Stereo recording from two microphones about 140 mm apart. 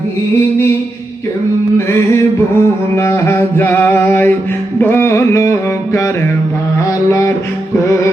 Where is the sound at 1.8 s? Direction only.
20° left (ahead or behind).